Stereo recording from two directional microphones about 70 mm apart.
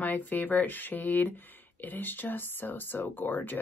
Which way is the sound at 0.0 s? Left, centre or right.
Left.